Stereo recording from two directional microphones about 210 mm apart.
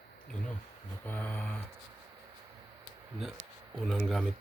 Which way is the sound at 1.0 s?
5° left (ahead or behind).